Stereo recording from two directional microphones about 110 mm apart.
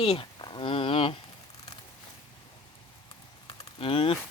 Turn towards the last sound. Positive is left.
turn(degrees=55)  # may be behind; listen again after turning